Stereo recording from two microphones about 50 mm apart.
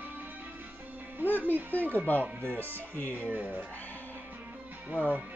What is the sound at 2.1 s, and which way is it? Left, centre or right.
Speech, left.